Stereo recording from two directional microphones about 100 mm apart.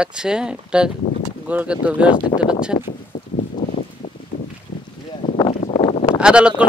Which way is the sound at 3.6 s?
45° left (ahead or behind).